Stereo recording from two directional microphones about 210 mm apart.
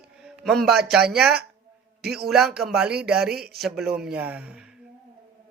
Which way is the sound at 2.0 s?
50° right (ahead or behind).